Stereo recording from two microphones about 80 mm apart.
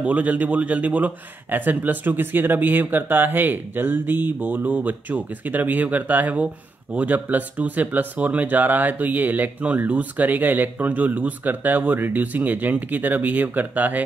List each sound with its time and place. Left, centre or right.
0.0 s a man's voice: centre